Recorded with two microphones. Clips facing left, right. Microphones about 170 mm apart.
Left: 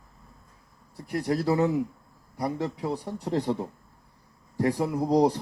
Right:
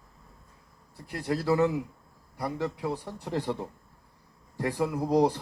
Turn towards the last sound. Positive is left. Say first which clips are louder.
# left 2 dB
turn(degrees=15)  # may be behind; listen again after turning